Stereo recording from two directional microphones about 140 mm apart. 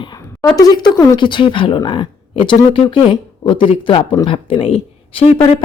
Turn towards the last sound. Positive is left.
turn(degrees=40)  # may be behind; listen again after turning